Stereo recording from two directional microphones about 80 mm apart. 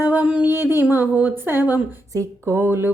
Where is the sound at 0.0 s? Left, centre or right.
Centre.